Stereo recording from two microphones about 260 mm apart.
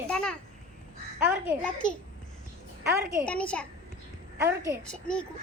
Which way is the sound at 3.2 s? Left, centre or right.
Centre.